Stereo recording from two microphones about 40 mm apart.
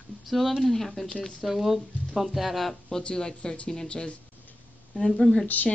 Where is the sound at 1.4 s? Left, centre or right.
Centre.